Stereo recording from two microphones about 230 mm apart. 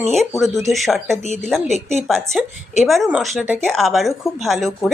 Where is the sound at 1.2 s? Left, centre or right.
Left.